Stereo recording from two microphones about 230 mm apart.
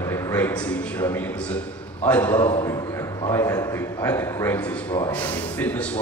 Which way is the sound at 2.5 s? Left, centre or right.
Centre.